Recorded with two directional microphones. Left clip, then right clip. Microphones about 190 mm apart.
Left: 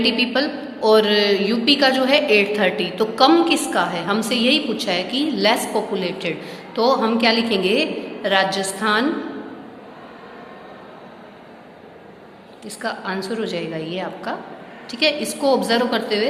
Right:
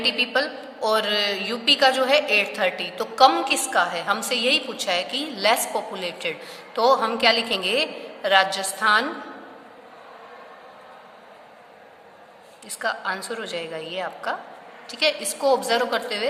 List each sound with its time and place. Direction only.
0.0 s a woman's voice: 30° right (ahead or behind)
12.6 s a woman's voice: 30° right (ahead or behind)